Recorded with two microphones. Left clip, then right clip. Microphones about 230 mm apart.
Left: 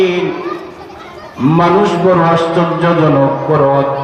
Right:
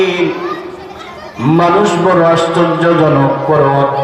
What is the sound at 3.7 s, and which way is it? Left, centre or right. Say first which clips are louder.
Mantra: right 1 dB; right.